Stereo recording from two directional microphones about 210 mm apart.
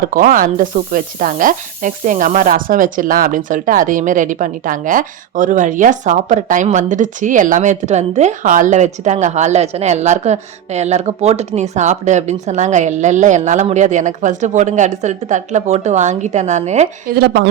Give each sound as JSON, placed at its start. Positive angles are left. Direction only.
{"t": 0.1, "sound": "sizzle", "side_deg": -40}
{"t": 17.2, "sound": "a woman's voice", "side_deg": -50}